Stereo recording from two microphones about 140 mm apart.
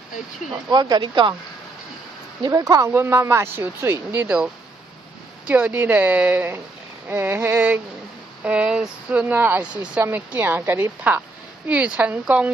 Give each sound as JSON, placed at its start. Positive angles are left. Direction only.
{"t": 0.7, "sound": "speech", "side_deg": -30}
{"t": 2.4, "sound": "speech", "side_deg": -25}
{"t": 5.5, "sound": "speech", "side_deg": -10}